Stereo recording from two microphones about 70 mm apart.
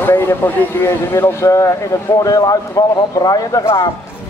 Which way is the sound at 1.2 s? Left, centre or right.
Left.